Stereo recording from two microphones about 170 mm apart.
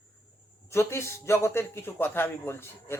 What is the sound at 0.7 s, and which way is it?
A man's voice, 15° left (ahead or behind).